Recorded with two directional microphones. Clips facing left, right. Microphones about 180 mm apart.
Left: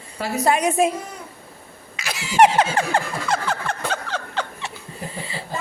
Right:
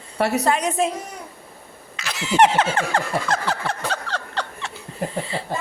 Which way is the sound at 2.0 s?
10° left (ahead or behind).